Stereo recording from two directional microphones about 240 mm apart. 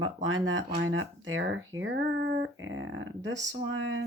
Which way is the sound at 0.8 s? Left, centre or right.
Right.